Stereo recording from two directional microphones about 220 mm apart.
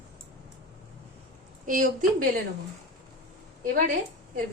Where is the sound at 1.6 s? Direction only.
35° right (ahead or behind).